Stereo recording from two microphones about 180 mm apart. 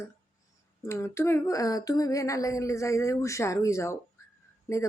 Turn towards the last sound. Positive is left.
turn(degrees=20)  # may be behind; listen again after turning